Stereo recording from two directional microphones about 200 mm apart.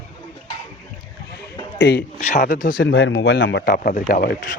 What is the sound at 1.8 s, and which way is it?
Speech, 55° left (ahead or behind).